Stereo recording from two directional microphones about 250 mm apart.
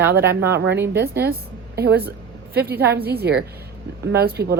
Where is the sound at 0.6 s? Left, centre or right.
Right.